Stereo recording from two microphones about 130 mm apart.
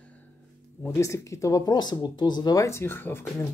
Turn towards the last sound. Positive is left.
turn(degrees=15)  # may be behind; listen again after turning